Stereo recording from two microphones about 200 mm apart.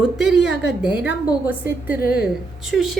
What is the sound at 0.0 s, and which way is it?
A woman's voice, 5° right (ahead or behind).